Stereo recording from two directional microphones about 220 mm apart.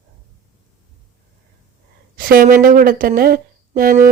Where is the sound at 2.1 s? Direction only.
40° right (ahead or behind).